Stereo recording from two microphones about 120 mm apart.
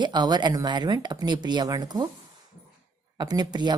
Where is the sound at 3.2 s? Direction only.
35° right (ahead or behind).